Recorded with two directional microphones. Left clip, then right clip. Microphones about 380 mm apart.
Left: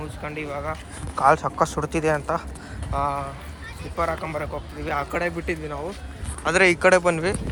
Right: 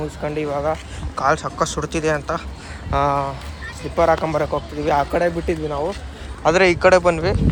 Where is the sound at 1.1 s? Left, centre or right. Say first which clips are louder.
Left 1 dB; centre.